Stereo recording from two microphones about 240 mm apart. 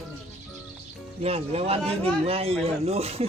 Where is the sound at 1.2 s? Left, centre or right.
Right.